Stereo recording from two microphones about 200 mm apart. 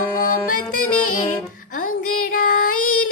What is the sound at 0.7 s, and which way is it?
Music, 40° left (ahead or behind).